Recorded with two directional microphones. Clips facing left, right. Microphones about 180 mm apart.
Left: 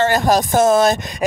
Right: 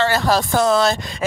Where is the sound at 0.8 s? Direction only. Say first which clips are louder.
Left 3 dB; 20° left (ahead or behind).